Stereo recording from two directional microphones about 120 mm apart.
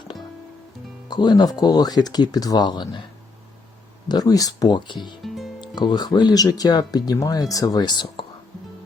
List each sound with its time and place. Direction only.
1.0 s speech: 35° left (ahead or behind)
4.1 s speech: 30° left (ahead or behind)
5.2 s music: centre (ahead or behind)
5.5 s speech: 35° left (ahead or behind)